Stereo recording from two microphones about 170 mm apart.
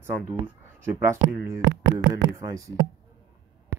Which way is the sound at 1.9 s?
20° right (ahead or behind).